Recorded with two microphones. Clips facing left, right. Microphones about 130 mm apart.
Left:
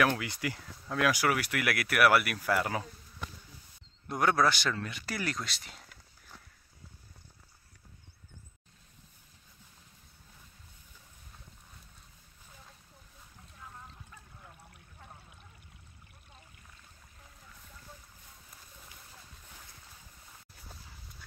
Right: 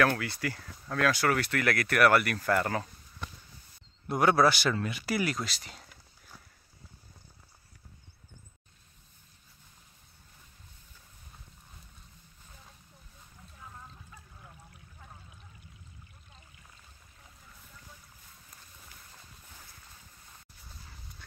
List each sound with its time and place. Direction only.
0.0 s speech: 15° left (ahead or behind)
4.1 s speech: 5° right (ahead or behind)